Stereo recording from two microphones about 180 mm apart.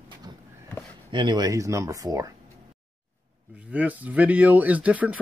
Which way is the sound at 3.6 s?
10° right (ahead or behind).